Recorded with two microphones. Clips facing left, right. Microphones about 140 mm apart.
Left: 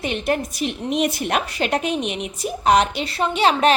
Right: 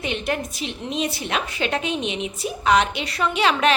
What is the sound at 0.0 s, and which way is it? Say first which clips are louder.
Speech: left 3 dB; 40° left (ahead or behind).